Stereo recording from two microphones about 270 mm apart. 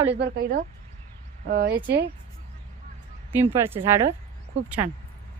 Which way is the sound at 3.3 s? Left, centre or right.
Centre.